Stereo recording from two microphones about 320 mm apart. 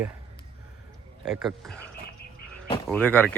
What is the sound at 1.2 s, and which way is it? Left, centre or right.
Speech, centre.